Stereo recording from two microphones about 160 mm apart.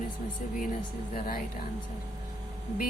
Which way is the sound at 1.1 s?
65° left (ahead or behind).